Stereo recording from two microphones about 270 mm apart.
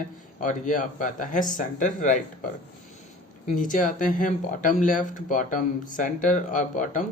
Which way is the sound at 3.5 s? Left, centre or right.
Left.